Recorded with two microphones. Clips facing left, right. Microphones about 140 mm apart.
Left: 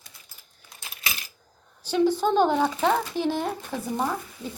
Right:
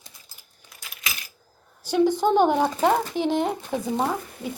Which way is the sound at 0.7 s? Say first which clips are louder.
Left 1 dB; 25° left (ahead or behind).